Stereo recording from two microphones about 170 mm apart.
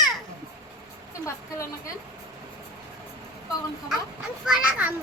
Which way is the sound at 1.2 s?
20° left (ahead or behind).